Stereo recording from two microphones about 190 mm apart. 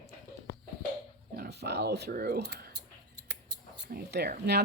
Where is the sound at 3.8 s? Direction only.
55° right (ahead or behind).